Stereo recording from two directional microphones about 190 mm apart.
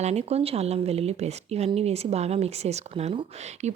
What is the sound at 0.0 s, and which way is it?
Speech, 35° right (ahead or behind).